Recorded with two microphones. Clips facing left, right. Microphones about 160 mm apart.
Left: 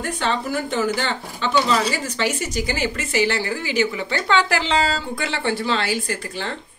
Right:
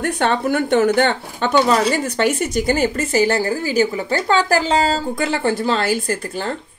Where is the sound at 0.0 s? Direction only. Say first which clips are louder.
Right 5 dB; 60° right (ahead or behind).